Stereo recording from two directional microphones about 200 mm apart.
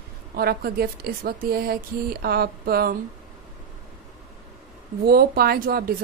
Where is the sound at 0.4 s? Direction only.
50° right (ahead or behind).